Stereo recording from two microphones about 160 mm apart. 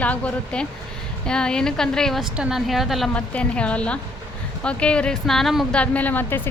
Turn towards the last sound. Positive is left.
turn(degrees=10)  # may be behind; listen again after turning